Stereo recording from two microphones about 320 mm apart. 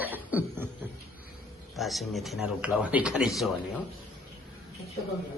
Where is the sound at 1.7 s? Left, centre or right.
Centre.